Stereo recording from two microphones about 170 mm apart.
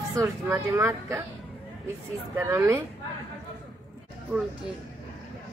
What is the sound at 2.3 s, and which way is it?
Speech, 15° right (ahead or behind).